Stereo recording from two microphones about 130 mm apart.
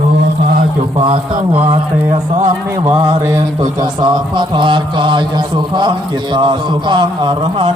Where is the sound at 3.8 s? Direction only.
35° right (ahead or behind).